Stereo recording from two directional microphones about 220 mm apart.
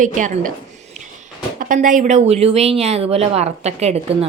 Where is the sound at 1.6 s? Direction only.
35° right (ahead or behind).